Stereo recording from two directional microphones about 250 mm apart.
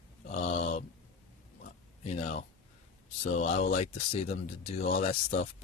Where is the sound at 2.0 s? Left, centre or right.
Left.